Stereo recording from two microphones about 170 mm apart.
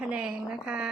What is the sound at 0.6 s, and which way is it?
Speech, 5° right (ahead or behind).